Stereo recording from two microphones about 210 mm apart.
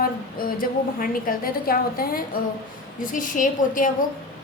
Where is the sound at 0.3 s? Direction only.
45° left (ahead or behind).